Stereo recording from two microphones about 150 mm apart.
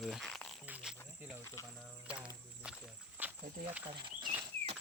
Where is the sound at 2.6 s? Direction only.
5° right (ahead or behind).